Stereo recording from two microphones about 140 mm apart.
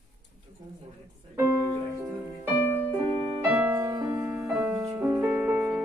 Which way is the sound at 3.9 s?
20° right (ahead or behind).